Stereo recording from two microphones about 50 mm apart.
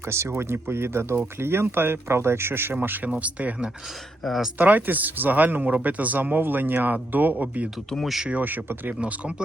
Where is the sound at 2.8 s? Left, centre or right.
Right.